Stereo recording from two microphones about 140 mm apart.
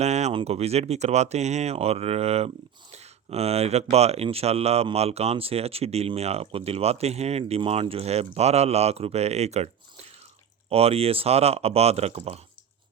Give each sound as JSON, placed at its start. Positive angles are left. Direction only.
{"t": 0.0, "sound": "speech", "side_deg": -55}